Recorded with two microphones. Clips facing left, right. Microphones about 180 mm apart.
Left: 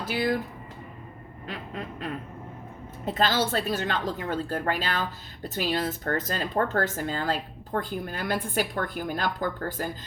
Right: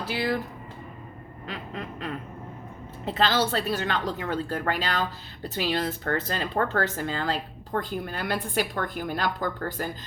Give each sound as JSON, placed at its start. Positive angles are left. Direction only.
{"t": 0.1, "sound": "speech", "side_deg": 45}
{"t": 1.5, "sound": "speech", "side_deg": 45}